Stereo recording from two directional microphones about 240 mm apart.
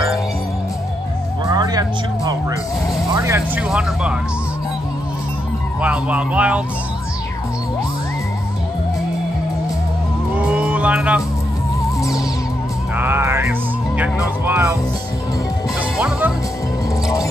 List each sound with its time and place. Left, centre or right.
1.5 s a sound: centre
3.1 s speech: centre
5.8 s speech: centre
10.3 s music: centre
12.9 s music: centre
14.4 s speech: centre
16.0 s music: centre